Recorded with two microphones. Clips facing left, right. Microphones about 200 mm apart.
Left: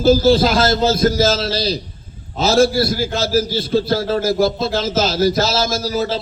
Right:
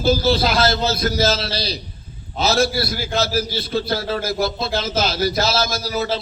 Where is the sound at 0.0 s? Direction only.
45° left (ahead or behind).